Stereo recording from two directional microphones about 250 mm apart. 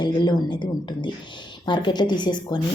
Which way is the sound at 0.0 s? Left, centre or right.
Centre.